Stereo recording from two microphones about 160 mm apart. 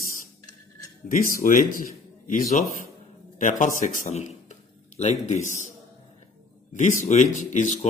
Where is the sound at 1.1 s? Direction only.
60° left (ahead or behind).